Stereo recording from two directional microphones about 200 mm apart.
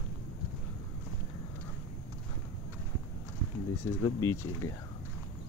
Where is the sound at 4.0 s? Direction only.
15° left (ahead or behind).